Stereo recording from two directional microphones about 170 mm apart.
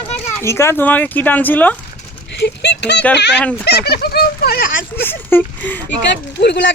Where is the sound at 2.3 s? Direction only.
80° left.